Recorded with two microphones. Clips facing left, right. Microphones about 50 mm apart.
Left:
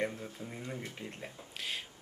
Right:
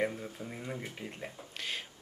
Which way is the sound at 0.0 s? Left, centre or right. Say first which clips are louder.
Right 2 dB; centre.